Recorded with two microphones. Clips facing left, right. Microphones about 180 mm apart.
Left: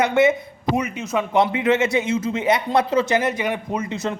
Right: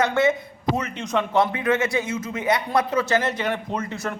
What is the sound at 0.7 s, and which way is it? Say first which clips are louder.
Speech: left 3 dB; 10° left (ahead or behind).